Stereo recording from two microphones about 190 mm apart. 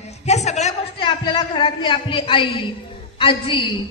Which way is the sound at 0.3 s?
35° left (ahead or behind).